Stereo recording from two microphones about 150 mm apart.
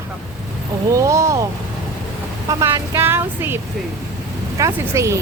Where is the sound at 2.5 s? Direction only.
20° right (ahead or behind).